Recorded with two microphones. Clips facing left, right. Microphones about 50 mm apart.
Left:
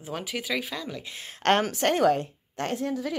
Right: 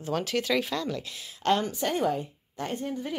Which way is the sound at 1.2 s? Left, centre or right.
Left.